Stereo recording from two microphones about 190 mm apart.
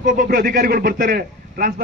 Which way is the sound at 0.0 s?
45° right (ahead or behind).